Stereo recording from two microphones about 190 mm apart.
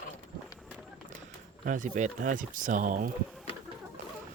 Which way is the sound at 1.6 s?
45° right (ahead or behind).